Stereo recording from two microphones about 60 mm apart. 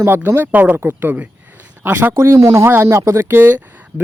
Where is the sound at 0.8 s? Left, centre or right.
Right.